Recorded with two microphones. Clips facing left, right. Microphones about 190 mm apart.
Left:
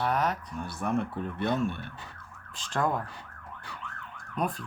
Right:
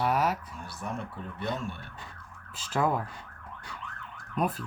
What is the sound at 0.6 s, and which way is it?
Speech, 55° left (ahead or behind).